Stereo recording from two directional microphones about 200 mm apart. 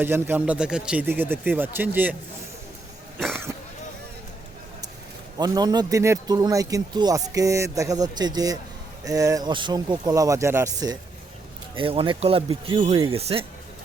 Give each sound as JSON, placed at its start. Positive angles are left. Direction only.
{"t": 0.0, "sound": "a man's voice", "side_deg": -10}
{"t": 3.5, "sound": "throat clearing", "side_deg": -10}
{"t": 5.4, "sound": "a man's voice", "side_deg": -20}
{"t": 11.7, "sound": "speech", "side_deg": -25}